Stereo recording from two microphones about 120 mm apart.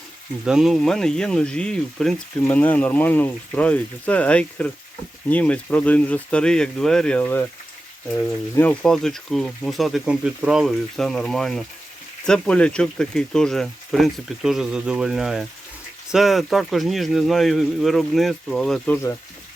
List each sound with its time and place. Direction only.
0.4 s speech: 5° right (ahead or behind)